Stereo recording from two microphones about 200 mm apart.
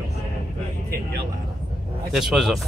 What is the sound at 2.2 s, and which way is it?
Speech, centre (ahead or behind).